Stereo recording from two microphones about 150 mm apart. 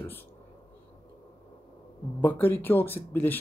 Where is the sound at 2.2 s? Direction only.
15° left (ahead or behind).